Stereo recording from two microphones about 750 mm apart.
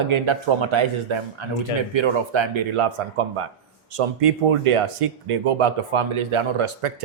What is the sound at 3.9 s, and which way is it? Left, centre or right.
Speech, right.